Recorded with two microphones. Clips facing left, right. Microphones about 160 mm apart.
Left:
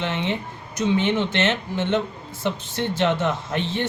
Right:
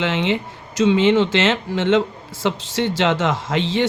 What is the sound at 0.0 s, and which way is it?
Speech, 90° right.